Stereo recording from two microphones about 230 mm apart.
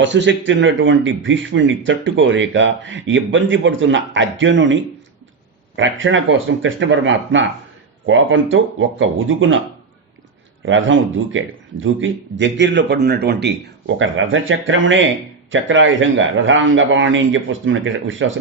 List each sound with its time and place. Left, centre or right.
0.0 s a man's voice: right
10.7 s a man's voice: right